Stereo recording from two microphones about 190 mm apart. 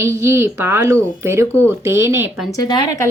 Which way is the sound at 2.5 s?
20° left (ahead or behind).